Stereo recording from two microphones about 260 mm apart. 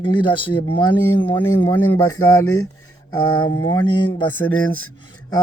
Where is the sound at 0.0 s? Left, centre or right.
Centre.